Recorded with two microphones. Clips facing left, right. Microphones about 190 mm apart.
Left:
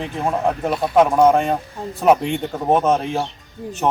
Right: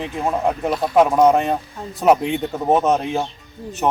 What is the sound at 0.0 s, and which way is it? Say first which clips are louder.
Speech: even; centre (ahead or behind).